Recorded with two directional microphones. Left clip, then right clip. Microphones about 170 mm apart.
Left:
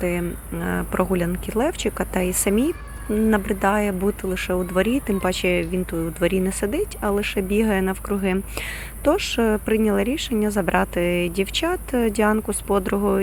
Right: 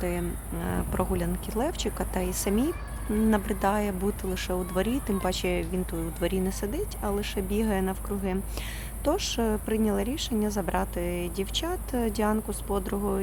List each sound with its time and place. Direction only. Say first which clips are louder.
0.0 s speech: left 7 dB; 25° left (ahead or behind)